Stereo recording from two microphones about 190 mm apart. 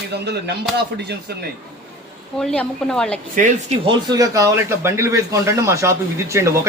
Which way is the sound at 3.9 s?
20° right (ahead or behind).